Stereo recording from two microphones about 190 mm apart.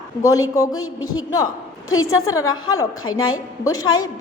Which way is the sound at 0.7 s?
90° left.